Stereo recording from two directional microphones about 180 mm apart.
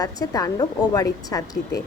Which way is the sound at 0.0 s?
20° left (ahead or behind).